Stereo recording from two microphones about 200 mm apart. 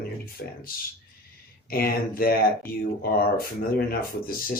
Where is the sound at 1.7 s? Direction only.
45° left (ahead or behind).